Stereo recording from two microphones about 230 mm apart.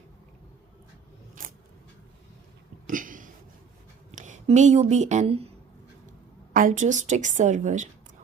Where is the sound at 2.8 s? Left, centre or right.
Right.